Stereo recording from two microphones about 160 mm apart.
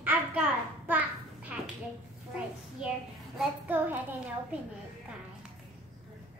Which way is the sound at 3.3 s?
10° right (ahead or behind).